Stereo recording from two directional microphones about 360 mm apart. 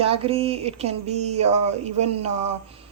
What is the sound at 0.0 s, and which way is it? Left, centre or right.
A woman's voice, centre.